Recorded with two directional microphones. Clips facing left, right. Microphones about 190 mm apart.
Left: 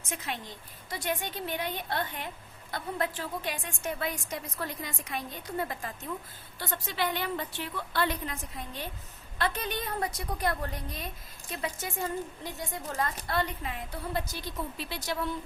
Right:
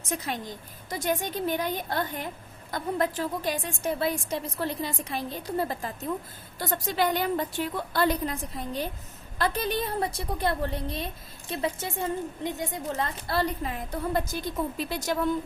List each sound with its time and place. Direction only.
0.1 s a woman's voice: 40° right (ahead or behind)